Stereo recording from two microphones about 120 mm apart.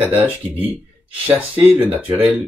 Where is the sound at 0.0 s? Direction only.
15° right (ahead or behind).